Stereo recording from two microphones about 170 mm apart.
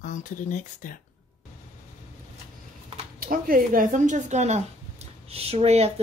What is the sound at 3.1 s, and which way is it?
Speech, 55° right (ahead or behind).